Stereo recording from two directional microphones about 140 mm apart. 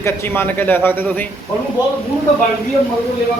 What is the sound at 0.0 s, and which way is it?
Speech, 15° left (ahead or behind).